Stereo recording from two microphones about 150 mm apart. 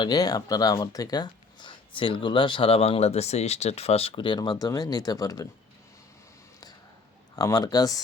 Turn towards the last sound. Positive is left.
turn(degrees=25)  # may be behind; listen again after turning